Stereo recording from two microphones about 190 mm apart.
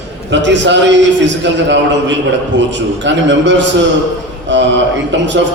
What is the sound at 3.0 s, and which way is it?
Speech, 70° right (ahead or behind).